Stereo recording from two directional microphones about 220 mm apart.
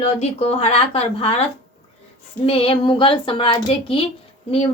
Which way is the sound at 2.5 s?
25° left (ahead or behind).